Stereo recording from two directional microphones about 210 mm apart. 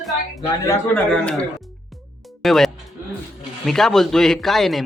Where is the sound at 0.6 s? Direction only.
10° left (ahead or behind).